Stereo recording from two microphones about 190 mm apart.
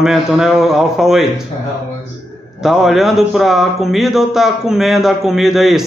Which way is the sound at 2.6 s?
Centre (ahead or behind).